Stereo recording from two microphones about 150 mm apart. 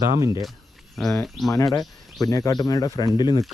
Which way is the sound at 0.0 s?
25° right (ahead or behind).